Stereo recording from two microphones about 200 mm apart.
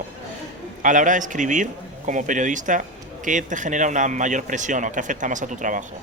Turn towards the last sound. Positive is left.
turn(degrees=-40)  # may be behind; listen again after turning